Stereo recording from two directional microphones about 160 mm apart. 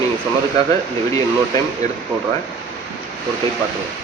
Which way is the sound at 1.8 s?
45° right (ahead or behind).